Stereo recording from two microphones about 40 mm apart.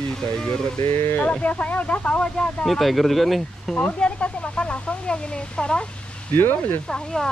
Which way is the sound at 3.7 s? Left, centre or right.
Left.